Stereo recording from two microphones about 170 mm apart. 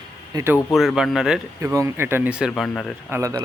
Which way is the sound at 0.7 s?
Centre (ahead or behind).